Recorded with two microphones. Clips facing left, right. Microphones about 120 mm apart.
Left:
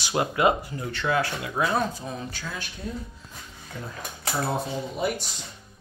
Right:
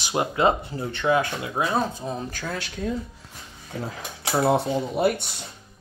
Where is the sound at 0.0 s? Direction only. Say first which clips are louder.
Right 1 dB; 20° right (ahead or behind).